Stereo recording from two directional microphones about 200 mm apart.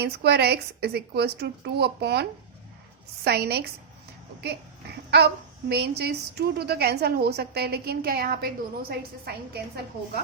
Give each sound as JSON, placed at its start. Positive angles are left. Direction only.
{"t": 0.0, "sound": "a child's voice", "side_deg": -55}
{"t": 3.2, "sound": "a woman's voice", "side_deg": -55}
{"t": 5.1, "sound": "a child's voice", "side_deg": -55}